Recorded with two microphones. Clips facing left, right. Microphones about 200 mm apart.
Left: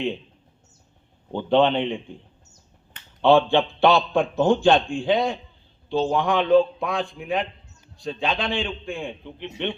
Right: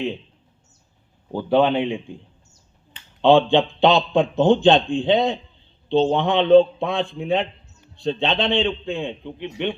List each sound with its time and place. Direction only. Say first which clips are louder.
1.3 s a man's voice: right 1 dB; 10° right (ahead or behind)
3.2 s a man's voice: right 2 dB; 15° right (ahead or behind)